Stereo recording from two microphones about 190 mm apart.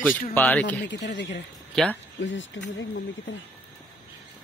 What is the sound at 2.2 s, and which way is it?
Speech, 80° left.